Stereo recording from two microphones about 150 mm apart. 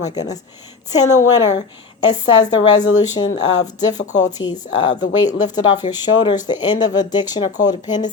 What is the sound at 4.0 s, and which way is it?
Speech, 55° left (ahead or behind).